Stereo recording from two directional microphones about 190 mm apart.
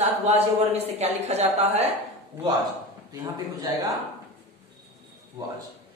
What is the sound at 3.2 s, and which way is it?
Speech, 20° right (ahead or behind).